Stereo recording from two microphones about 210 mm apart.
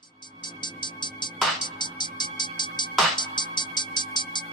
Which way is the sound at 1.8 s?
20° left (ahead or behind).